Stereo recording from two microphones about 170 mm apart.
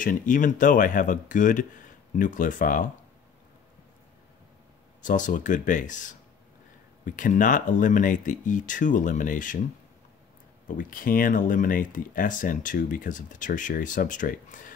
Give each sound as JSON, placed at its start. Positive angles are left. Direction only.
{"t": 0.0, "sound": "speech", "side_deg": 50}
{"t": 5.0, "sound": "speech", "side_deg": 50}
{"t": 10.8, "sound": "speech", "side_deg": 55}